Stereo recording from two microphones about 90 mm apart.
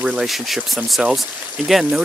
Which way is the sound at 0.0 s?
10° right (ahead or behind).